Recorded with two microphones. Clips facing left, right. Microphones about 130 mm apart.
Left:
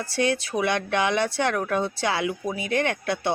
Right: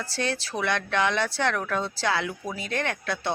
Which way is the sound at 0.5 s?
15° left (ahead or behind).